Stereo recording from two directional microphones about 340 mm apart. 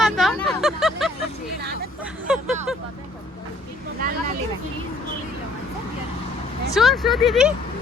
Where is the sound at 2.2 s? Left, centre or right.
Centre.